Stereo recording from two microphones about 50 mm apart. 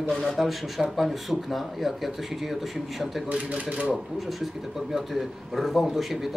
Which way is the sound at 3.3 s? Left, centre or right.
Right.